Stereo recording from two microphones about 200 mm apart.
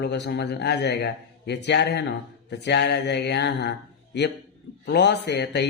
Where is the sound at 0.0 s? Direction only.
55° left (ahead or behind).